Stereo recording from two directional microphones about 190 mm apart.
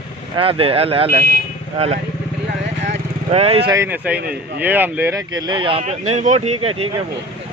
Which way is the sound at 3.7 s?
10° right (ahead or behind).